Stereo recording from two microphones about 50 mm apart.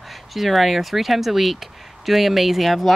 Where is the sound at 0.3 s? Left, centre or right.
Centre.